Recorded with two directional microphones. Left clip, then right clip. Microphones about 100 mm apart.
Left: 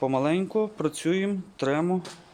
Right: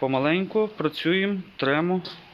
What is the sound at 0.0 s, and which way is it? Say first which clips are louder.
Speech: right 2 dB; 30° left (ahead or behind).